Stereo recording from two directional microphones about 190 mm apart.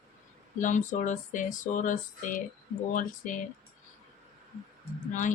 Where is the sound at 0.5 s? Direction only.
40° left (ahead or behind).